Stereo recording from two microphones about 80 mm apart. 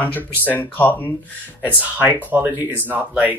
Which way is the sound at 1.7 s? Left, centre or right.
Right.